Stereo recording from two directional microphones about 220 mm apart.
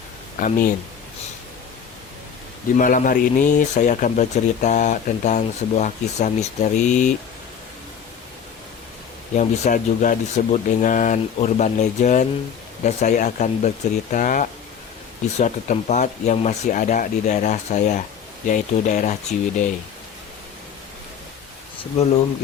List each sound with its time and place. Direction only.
0.3 s speech: 35° left (ahead or behind)
2.7 s speech: 35° left (ahead or behind)
9.3 s speech: 35° left (ahead or behind)